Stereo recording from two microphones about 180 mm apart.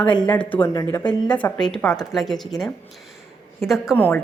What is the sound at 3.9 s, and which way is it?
Speech, 10° left (ahead or behind).